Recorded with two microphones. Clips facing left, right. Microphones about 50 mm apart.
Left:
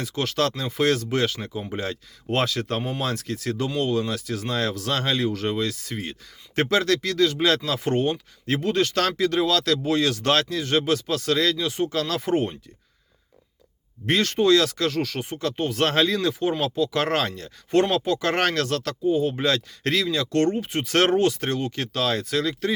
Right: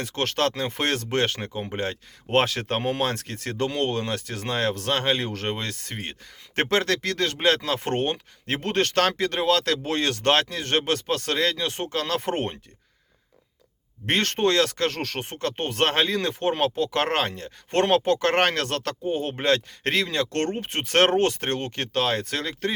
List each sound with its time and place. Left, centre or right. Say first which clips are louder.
0.0 s speech: even; right
2.4 s speech: left 2 dB; right
14.1 s speech: left 3 dB; right
17.7 s speech: even; right